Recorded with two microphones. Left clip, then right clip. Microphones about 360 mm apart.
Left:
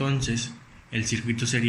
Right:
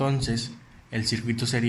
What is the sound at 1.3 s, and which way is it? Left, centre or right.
Speech, centre.